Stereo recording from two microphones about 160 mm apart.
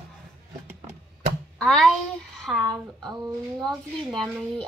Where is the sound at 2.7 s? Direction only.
25° right (ahead or behind).